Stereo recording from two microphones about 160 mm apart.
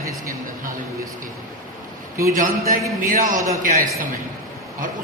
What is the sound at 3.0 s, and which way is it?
A woman's voice, 55° right (ahead or behind).